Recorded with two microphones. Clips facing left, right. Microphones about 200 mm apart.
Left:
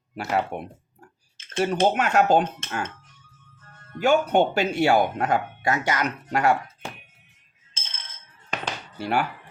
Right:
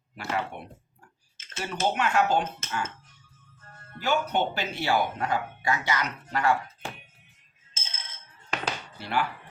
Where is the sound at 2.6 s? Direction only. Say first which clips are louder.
Left 2 dB; 55° left (ahead or behind).